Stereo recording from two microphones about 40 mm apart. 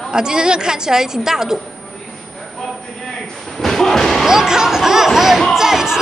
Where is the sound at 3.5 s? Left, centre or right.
Centre.